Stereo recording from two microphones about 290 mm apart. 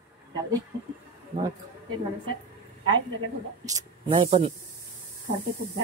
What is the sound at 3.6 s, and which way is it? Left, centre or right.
Speech, centre.